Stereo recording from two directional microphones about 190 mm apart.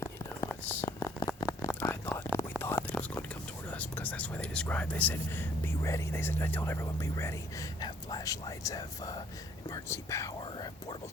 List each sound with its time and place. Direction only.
0.6 s a sound: 10° left (ahead or behind)
2.6 s whispering: 10° left (ahead or behind)
3.7 s speech: 10° left (ahead or behind)